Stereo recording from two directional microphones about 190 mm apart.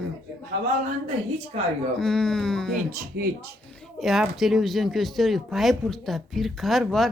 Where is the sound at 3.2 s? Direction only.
60° right (ahead or behind).